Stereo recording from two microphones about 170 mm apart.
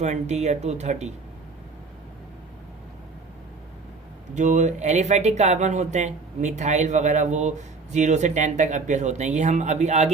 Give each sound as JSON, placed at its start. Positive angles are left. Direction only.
{"t": 0.0, "sound": "speech", "side_deg": -40}
{"t": 4.4, "sound": "speech", "side_deg": -45}